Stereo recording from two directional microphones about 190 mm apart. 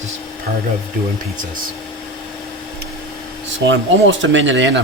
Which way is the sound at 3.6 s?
75° right (ahead or behind).